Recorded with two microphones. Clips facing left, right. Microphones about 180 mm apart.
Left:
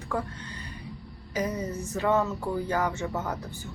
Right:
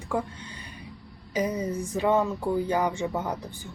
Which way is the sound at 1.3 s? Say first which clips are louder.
Right 3 dB; 10° right (ahead or behind).